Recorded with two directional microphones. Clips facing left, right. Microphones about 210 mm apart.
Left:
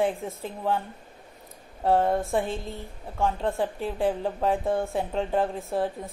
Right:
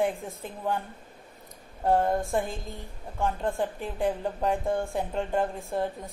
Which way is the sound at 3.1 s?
Centre (ahead or behind).